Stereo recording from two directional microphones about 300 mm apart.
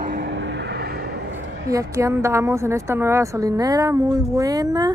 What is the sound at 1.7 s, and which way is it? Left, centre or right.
Speech, centre.